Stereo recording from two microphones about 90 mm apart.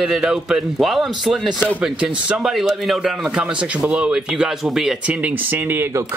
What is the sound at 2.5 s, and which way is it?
Speech, centre (ahead or behind).